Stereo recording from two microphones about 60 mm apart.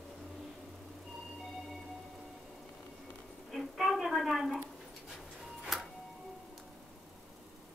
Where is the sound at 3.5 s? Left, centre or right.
Centre.